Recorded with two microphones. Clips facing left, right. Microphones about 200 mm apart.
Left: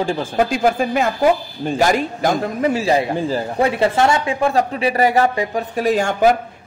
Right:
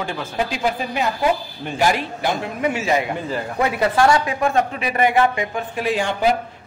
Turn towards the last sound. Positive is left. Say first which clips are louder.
# left 4 dB
turn(degrees=45)  # may be behind; listen again after turning